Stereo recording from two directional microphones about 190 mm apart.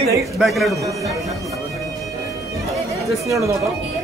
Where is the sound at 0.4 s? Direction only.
Centre (ahead or behind).